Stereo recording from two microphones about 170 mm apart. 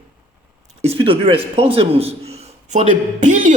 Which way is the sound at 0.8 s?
35° right (ahead or behind).